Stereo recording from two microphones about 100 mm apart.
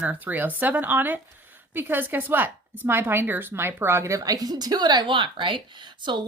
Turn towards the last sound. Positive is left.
turn(degrees=-50)  # may be behind; listen again after turning